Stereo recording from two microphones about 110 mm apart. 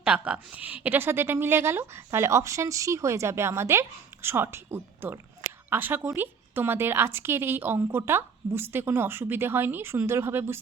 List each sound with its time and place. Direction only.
0.0 s a woman's voice: 10° right (ahead or behind)